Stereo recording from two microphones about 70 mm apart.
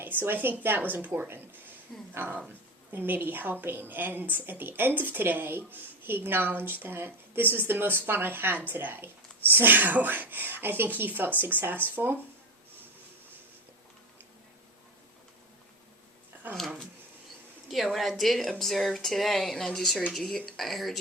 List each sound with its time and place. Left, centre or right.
0.0 s a woman's voice: right
16.6 s speech: centre